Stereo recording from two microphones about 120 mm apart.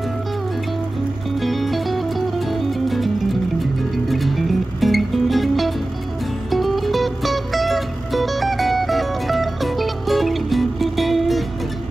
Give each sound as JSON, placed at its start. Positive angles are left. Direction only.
{"t": 1.4, "sound": "music", "side_deg": 0}